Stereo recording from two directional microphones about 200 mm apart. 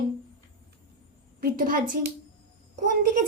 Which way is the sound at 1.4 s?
45° right (ahead or behind).